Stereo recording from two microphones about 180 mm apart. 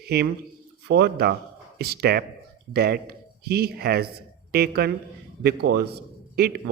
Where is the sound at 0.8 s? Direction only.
65° right (ahead or behind).